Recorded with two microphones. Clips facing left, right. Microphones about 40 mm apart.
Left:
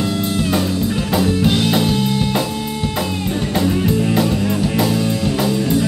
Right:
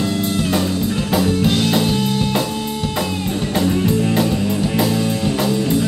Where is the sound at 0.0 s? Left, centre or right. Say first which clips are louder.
Even; centre.